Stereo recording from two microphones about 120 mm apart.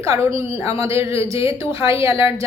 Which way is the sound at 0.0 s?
25° right (ahead or behind).